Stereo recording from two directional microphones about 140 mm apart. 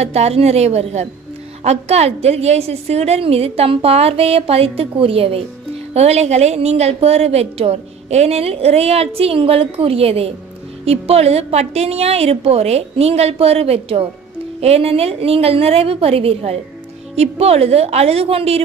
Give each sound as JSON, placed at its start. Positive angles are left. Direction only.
{"t": 0.0, "sound": "a woman's voice", "side_deg": -50}